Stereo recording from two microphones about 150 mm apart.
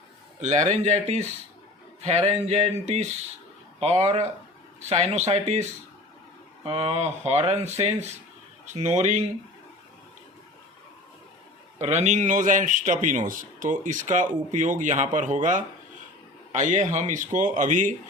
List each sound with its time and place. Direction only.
0.3 s speech: 50° right (ahead or behind)
6.7 s speech: 45° right (ahead or behind)
11.8 s a man's voice: 50° right (ahead or behind)